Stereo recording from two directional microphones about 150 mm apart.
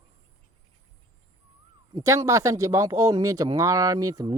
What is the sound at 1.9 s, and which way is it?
Speech, 20° right (ahead or behind).